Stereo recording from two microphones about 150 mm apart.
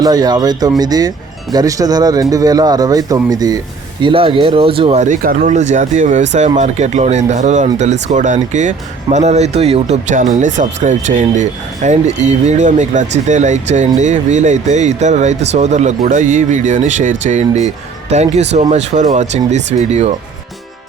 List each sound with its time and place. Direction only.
0.0 s speech: 25° right (ahead or behind)
4.0 s speech: 35° right (ahead or behind)
5.0 s speech: 55° right (ahead or behind)